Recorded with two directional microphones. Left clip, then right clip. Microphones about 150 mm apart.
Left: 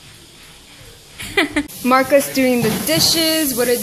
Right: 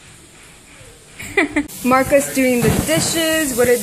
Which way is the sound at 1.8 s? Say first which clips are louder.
Left 1 dB; centre (ahead or behind).